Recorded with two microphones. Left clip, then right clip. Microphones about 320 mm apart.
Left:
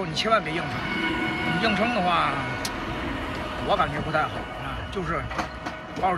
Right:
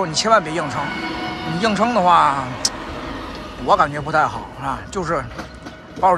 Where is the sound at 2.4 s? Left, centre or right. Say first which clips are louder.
Right 5 dB; right.